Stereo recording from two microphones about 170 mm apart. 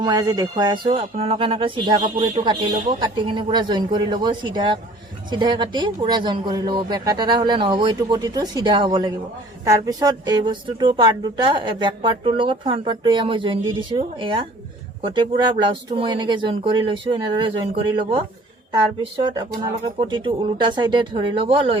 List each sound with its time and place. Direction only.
0.0 s speech: 25° right (ahead or behind)